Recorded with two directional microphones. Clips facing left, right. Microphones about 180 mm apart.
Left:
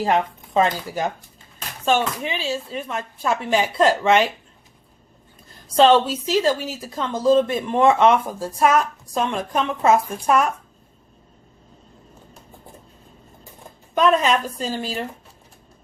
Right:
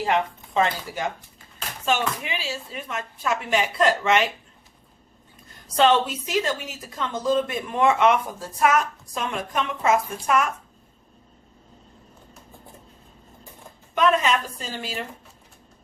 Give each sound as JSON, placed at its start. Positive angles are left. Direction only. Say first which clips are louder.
{"t": 0.0, "sound": "speech", "louder": "left 3 dB", "side_deg": 40}
{"t": 5.7, "sound": "speech", "louder": "left 4 dB", "side_deg": 30}
{"t": 14.6, "sound": "speech", "louder": "left 6 dB", "side_deg": 40}